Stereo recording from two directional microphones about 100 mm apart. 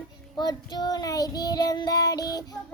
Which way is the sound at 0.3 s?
45° left (ahead or behind).